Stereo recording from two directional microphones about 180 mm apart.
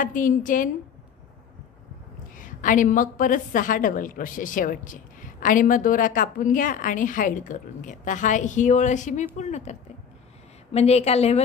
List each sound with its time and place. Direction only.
0.0 s a woman's voice: 50° left (ahead or behind)
2.3 s a woman's voice: 45° left (ahead or behind)